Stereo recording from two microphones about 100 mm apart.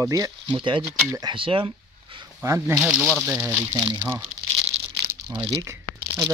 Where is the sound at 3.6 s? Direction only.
35° right (ahead or behind).